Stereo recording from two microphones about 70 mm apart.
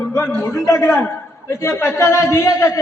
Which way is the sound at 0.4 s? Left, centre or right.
Left.